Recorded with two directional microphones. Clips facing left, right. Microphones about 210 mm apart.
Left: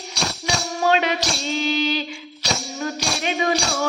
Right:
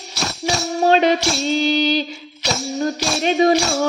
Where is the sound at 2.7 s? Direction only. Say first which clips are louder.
Right 5 dB; 35° right (ahead or behind).